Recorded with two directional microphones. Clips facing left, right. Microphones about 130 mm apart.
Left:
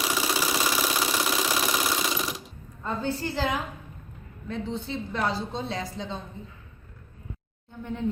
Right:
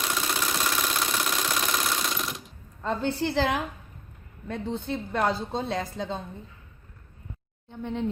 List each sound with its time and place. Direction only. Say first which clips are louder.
0.0 s engine: left 2 dB; 5° left (ahead or behind)
2.8 s a woman's voice: right 2 dB; 75° right (ahead or behind)
4.4 s a woman's voice: right 1 dB; 55° right (ahead or behind)